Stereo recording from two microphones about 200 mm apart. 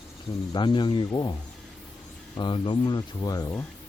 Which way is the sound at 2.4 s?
25° left (ahead or behind).